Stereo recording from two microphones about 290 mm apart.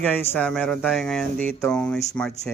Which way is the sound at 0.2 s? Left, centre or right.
Centre.